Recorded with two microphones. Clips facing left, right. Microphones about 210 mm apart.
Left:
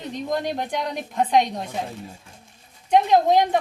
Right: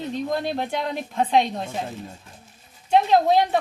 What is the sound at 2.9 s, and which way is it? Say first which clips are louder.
Speech: left 1 dB; 15° left (ahead or behind).